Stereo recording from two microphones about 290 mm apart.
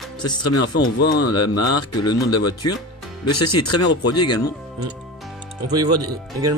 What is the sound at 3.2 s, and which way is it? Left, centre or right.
Speech, left.